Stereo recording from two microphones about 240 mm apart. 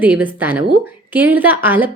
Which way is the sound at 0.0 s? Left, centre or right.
Centre.